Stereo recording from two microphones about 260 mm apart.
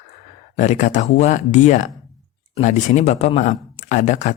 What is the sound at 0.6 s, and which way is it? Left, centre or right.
Speech, left.